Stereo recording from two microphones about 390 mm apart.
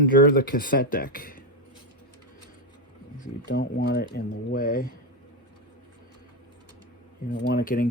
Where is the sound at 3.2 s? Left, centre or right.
Left.